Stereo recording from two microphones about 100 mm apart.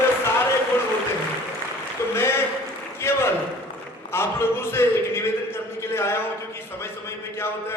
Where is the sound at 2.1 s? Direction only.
25° left (ahead or behind).